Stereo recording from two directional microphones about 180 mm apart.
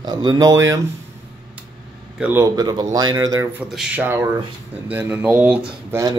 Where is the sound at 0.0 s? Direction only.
25° right (ahead or behind).